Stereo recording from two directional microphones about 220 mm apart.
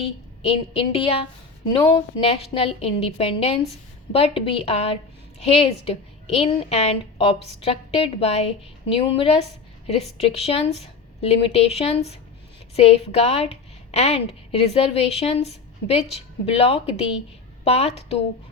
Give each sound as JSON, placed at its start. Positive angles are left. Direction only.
{"t": 0.4, "sound": "a woman's voice", "side_deg": 25}